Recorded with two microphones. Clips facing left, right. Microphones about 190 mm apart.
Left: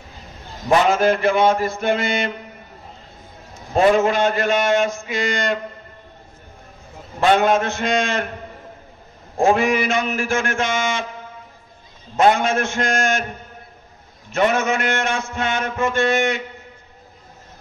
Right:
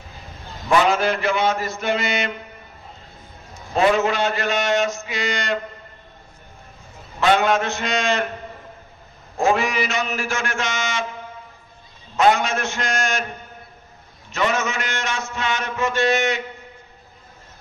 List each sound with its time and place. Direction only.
0.7 s a man's voice: 45° left (ahead or behind)
3.7 s a man's voice: 50° left (ahead or behind)
7.2 s a man's voice: 50° left (ahead or behind)
9.4 s a man's voice: 50° left (ahead or behind)
12.2 s a man's voice: 50° left (ahead or behind)
14.3 s a man's voice: 55° left (ahead or behind)